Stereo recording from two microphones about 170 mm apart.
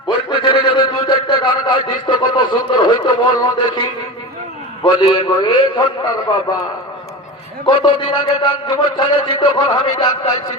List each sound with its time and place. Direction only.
0.3 s a sound: 30° left (ahead or behind)
4.8 s a man's voice: 25° left (ahead or behind)
7.6 s a man's voice: 30° left (ahead or behind)